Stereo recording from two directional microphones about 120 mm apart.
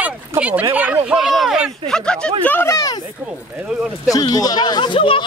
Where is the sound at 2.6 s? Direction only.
30° left (ahead or behind).